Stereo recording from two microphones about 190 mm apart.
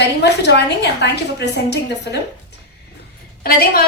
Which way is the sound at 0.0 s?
60° left (ahead or behind).